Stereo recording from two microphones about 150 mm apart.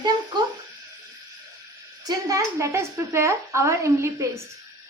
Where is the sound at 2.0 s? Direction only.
25° right (ahead or behind).